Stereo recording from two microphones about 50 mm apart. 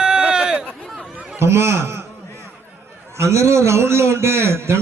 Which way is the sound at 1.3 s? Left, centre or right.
Right.